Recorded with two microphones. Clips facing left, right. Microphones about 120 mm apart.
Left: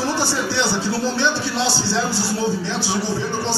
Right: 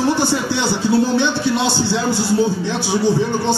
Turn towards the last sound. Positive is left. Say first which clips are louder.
# right 6 dB
turn(degrees=-20)  # may be behind; listen again after turning